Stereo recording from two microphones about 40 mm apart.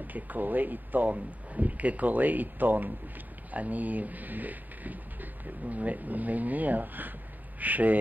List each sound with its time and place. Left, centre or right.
0.0 s speech: right